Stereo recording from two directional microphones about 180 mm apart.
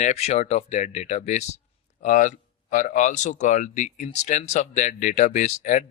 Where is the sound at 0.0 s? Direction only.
35° left (ahead or behind).